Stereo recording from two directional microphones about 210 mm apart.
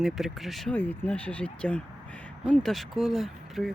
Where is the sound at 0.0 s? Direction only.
Centre (ahead or behind).